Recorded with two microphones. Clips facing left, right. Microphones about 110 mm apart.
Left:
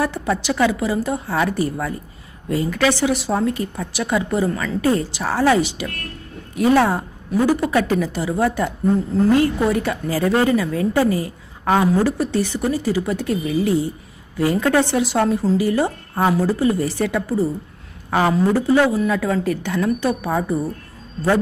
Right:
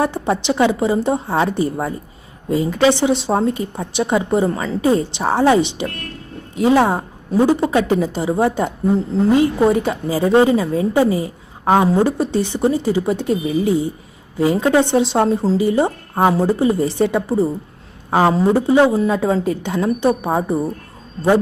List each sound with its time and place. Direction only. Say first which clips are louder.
0.0 s a woman's voice: right 3 dB; 25° right (ahead or behind)